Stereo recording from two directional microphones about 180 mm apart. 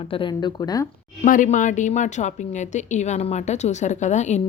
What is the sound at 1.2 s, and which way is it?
A woman's voice, 45° left (ahead or behind).